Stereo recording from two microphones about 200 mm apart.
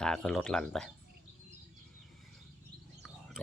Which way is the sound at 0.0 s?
5° left (ahead or behind).